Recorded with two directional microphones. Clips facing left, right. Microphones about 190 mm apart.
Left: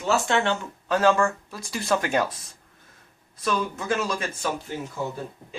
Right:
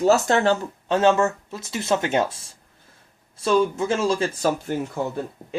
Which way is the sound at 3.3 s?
25° right (ahead or behind).